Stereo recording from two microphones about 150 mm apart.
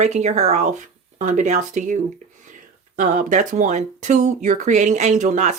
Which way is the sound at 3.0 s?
60° right (ahead or behind).